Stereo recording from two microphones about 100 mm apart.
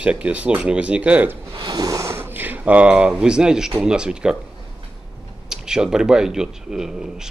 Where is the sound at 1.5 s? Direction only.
40° right (ahead or behind); by 4.4 s 10° right (ahead or behind).